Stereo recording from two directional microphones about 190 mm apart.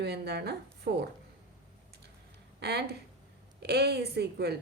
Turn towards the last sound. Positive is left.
turn(degrees=-55)  # may be behind; listen again after turning